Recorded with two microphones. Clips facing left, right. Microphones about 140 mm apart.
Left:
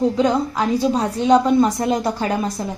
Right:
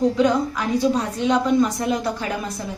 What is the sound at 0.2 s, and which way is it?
A woman's voice, 30° left (ahead or behind).